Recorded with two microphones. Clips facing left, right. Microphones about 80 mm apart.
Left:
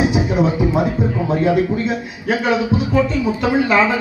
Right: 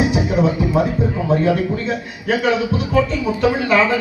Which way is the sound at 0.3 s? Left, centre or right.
Centre.